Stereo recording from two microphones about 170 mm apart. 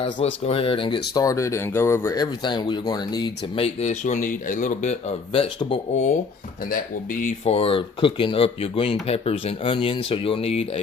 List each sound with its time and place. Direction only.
0.4 s speech: 35° left (ahead or behind)
1.1 s speech: 20° left (ahead or behind)
6.7 s speech: 55° left (ahead or behind); by 10.7 s 35° left (ahead or behind)